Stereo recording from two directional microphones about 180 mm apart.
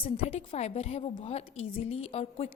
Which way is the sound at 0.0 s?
35° left (ahead or behind).